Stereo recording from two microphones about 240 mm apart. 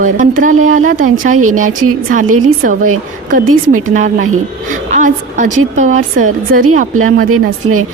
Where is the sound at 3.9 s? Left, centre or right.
Right.